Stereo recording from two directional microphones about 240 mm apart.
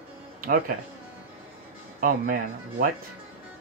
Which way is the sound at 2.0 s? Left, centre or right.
Right.